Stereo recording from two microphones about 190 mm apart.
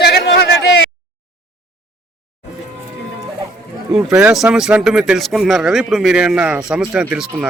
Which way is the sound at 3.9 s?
5° right (ahead or behind).